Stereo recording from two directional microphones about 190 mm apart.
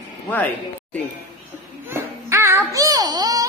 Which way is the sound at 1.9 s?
15° right (ahead or behind).